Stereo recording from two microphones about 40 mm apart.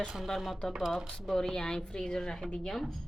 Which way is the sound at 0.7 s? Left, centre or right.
Centre.